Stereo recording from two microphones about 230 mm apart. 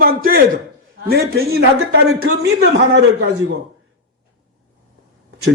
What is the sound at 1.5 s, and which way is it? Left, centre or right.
Speech, right.